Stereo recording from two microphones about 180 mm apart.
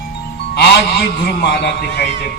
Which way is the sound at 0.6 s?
60° left (ahead or behind).